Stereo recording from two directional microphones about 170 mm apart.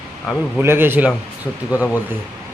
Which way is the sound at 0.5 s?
15° right (ahead or behind).